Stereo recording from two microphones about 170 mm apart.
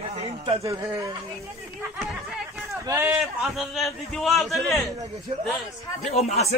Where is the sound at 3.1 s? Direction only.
Centre (ahead or behind).